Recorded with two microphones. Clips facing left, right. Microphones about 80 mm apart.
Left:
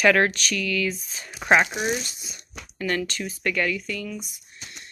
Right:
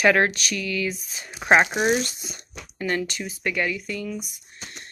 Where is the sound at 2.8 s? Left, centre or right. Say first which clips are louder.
Even; right.